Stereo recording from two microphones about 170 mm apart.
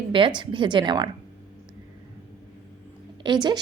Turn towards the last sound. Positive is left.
turn(degrees=-25)  # may be behind; listen again after turning